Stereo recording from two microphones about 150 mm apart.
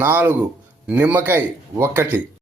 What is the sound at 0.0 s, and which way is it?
Speech, 15° right (ahead or behind).